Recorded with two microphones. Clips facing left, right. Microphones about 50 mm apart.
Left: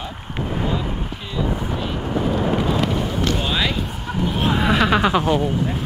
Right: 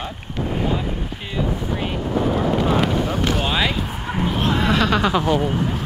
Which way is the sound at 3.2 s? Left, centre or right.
Centre.